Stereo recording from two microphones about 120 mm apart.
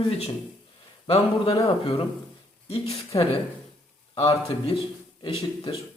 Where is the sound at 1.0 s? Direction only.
50° left (ahead or behind).